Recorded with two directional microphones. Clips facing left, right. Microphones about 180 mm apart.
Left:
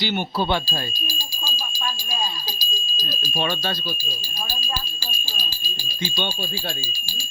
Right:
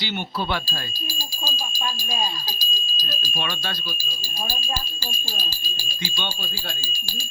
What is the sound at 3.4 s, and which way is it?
Speech, 35° left (ahead or behind).